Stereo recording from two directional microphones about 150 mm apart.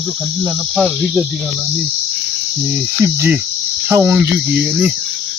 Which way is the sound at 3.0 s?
15° right (ahead or behind).